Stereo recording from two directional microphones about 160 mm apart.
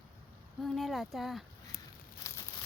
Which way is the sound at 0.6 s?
Centre (ahead or behind).